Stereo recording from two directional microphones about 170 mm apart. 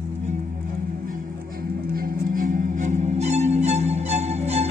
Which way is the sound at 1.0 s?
55° right (ahead or behind).